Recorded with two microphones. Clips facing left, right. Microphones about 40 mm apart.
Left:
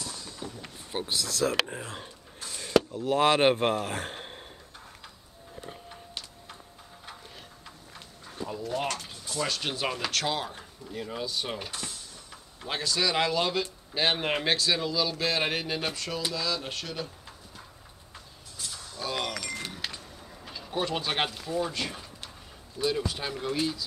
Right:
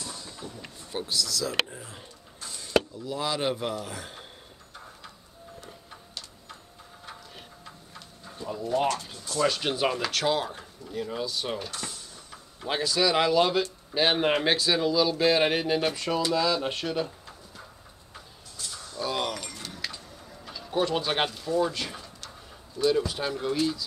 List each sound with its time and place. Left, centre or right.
0.0 s vehicle: centre
0.9 s speech: left
9.4 s speech: centre
11.8 s a sound: centre
13.9 s speech: centre
18.6 s a sound: centre
21.3 s speech: centre
23.5 s speech: centre